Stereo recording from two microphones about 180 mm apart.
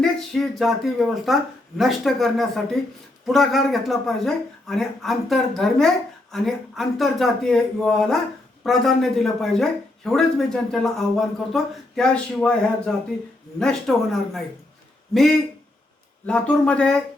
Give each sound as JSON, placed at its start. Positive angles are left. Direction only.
{"t": 0.0, "sound": "speech", "side_deg": 0}